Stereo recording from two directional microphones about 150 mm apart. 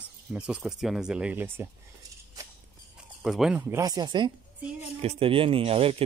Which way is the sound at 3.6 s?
20° right (ahead or behind).